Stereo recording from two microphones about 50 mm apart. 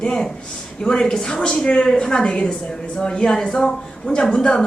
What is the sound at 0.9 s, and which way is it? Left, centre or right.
A woman's voice, centre.